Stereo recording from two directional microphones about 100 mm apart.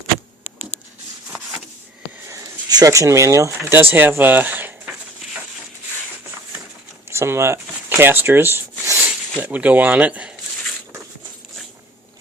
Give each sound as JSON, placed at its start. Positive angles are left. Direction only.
{"t": 2.3, "sound": "speech", "side_deg": -40}
{"t": 7.1, "sound": "speech", "side_deg": -25}